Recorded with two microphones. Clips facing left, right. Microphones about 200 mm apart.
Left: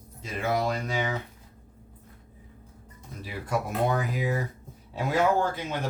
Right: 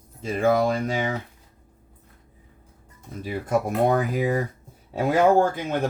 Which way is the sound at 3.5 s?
50° right (ahead or behind).